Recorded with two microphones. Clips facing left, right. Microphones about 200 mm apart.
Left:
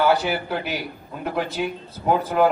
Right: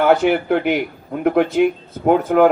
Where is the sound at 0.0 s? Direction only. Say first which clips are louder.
Right 6 dB; 60° right (ahead or behind).